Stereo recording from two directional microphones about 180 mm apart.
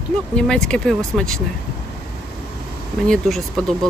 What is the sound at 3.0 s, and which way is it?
Speech, 5° left (ahead or behind).